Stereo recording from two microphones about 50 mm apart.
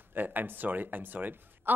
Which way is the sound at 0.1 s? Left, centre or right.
Right.